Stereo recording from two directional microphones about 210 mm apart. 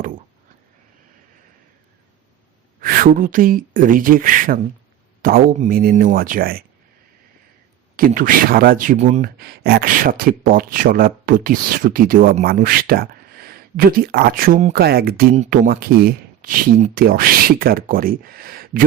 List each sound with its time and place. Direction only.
2.8 s speech: 45° right (ahead or behind)
7.9 s speech: 40° right (ahead or behind)